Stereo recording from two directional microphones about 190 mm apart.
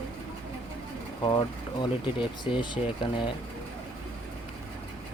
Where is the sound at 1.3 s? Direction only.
25° left (ahead or behind).